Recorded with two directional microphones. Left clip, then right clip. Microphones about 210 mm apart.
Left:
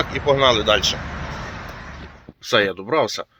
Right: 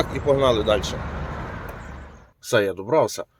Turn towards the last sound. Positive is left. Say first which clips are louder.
# even
turn(degrees=-5)  # may be behind; listen again after turning